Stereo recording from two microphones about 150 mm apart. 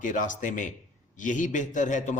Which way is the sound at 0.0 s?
60° left (ahead or behind).